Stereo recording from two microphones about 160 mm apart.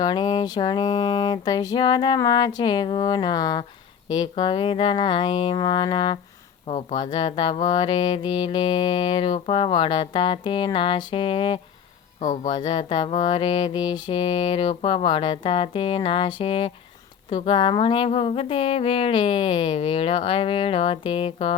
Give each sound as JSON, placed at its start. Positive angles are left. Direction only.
{"t": 0.0, "sound": "music", "side_deg": 25}
{"t": 12.2, "sound": "speech", "side_deg": 50}
{"t": 12.5, "sound": "music", "side_deg": 30}